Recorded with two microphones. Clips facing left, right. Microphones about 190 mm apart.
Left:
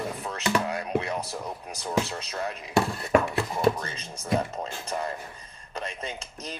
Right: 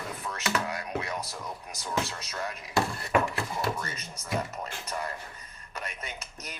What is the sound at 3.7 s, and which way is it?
Speech, 30° left (ahead or behind).